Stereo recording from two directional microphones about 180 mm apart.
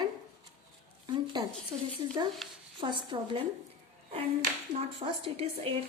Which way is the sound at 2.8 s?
25° right (ahead or behind).